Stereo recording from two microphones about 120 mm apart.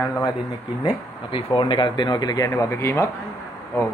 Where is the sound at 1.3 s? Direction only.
45° left (ahead or behind); by 3.1 s 25° left (ahead or behind).